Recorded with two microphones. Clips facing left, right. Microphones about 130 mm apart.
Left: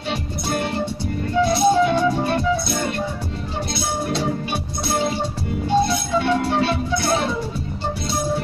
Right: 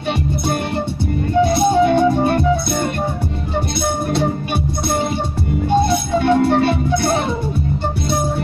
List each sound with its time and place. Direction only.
1.4 s music: 55° right (ahead or behind)
5.7 s music: 55° right (ahead or behind)